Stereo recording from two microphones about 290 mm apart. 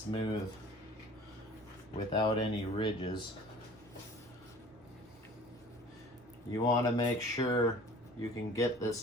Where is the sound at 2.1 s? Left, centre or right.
Centre.